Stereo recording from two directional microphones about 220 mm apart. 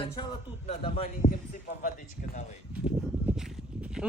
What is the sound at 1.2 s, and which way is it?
Speech, 40° left (ahead or behind).